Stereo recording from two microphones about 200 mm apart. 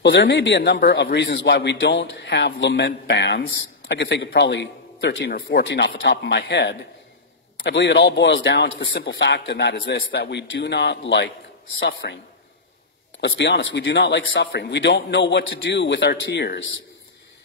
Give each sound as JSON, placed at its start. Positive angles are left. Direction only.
{"t": 0.0, "sound": "a man's voice", "side_deg": 60}
{"t": 13.2, "sound": "a man's voice", "side_deg": 65}